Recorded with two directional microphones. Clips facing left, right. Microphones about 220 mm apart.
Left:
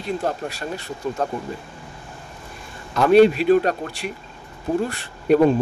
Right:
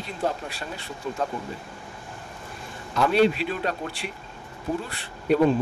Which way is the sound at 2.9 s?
50° left (ahead or behind).